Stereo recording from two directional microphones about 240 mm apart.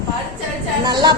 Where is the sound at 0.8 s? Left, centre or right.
Centre.